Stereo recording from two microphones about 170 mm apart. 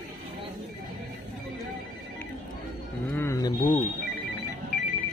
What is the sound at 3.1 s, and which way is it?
Bird, 15° left (ahead or behind).